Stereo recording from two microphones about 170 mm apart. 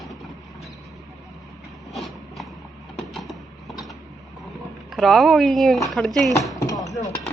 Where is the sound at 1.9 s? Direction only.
Centre (ahead or behind).